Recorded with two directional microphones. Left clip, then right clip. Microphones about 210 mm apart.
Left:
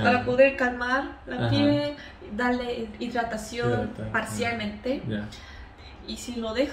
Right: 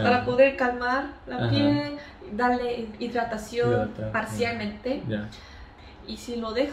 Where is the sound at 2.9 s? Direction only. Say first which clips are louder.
Right 1 dB; 20° left (ahead or behind).